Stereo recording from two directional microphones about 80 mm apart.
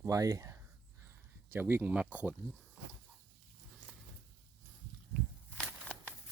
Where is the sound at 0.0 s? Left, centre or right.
Right.